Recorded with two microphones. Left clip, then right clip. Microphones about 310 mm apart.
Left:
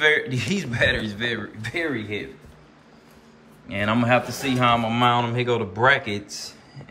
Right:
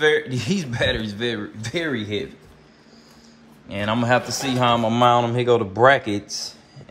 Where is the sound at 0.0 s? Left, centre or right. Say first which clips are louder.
Right 1 dB; centre.